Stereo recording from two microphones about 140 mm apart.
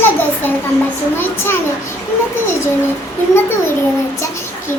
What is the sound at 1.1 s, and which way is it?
Speech, 15° left (ahead or behind).